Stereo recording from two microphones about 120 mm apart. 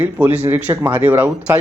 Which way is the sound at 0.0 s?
15° right (ahead or behind).